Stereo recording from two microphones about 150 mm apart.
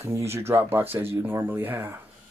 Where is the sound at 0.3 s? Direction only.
15° right (ahead or behind).